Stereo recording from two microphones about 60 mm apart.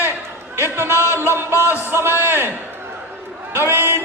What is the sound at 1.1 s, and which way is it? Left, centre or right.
Music, right.